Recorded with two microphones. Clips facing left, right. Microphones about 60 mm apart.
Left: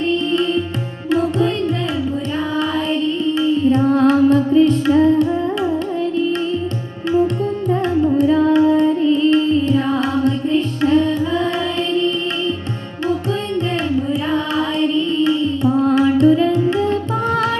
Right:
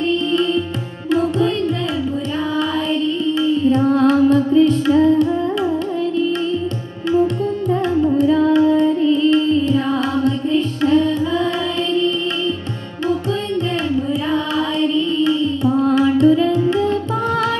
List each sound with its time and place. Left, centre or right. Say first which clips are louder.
2.9 s music: even; left
4.6 s carnatic music: even; left
7.9 s carnatic music: even; centre
8.2 s music: left 1 dB; left
14.3 s music: even; left